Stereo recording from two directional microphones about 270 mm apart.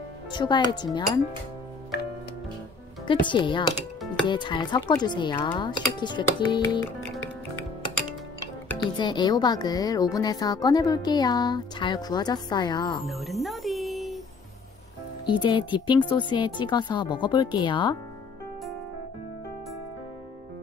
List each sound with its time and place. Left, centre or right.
0.3 s speech: centre
3.1 s speech: centre
8.6 s speech: centre
13.0 s music: centre
15.2 s speech: centre